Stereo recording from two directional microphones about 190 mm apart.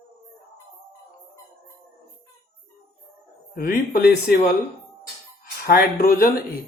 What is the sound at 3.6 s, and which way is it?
Speech, 50° left (ahead or behind).